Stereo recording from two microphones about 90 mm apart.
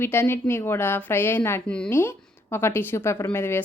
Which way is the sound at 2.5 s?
25° left (ahead or behind).